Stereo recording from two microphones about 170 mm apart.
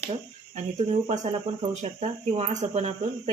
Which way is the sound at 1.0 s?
45° right (ahead or behind).